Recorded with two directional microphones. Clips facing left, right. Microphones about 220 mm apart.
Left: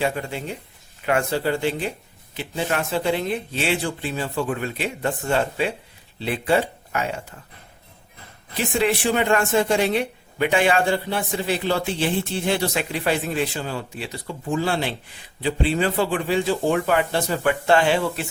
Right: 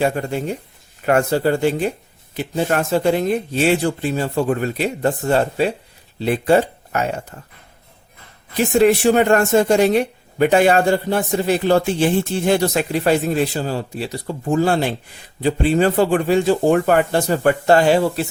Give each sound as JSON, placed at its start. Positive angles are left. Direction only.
{"t": 0.0, "sound": "speech", "side_deg": -45}
{"t": 8.5, "sound": "speech", "side_deg": -45}